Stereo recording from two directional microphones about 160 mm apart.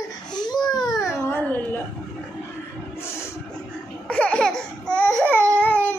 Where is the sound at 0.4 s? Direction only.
25° left (ahead or behind).